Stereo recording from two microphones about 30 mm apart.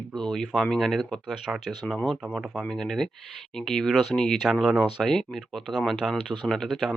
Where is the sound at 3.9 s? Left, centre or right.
Centre.